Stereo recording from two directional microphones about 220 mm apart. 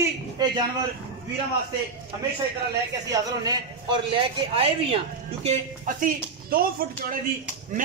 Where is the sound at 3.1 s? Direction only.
20° right (ahead or behind).